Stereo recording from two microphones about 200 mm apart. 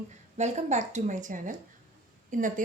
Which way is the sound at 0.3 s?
35° right (ahead or behind).